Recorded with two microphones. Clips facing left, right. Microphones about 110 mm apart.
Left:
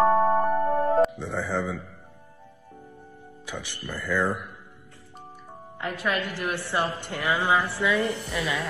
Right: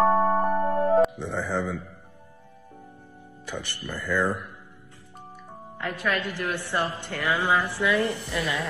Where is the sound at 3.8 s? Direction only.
15° right (ahead or behind).